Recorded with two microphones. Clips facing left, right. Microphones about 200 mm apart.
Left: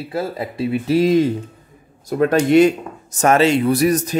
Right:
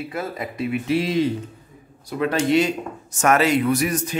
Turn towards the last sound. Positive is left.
turn(degrees=40)  # may be behind; listen again after turning